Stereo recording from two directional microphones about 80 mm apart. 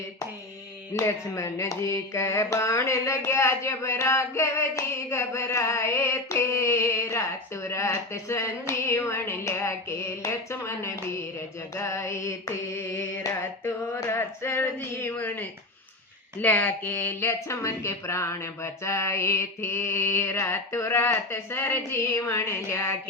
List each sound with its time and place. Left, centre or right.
0.9 s carnatic music: left
12.7 s mantra: left
13.4 s carnatic music: left